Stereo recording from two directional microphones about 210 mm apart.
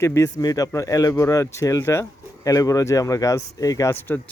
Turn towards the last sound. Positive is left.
turn(degrees=10)  # may be behind; listen again after turning